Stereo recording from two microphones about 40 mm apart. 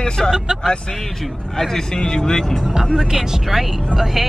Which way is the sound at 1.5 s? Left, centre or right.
Centre.